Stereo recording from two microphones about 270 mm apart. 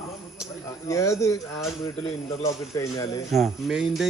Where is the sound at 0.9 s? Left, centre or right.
Centre.